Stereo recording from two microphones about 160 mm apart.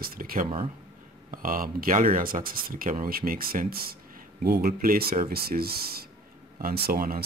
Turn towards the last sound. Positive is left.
turn(degrees=-65)  # may be behind; listen again after turning